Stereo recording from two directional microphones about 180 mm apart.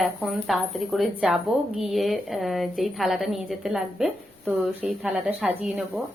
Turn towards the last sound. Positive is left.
turn(degrees=-5)  # may be behind; listen again after turning